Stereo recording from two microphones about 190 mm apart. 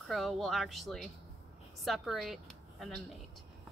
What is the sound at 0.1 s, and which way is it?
A woman's voice, centre (ahead or behind).